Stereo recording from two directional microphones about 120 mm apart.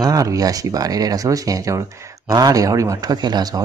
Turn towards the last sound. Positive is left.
turn(degrees=-35)  # may be behind; listen again after turning